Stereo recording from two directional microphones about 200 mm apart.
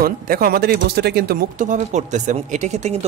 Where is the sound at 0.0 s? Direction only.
50° right (ahead or behind).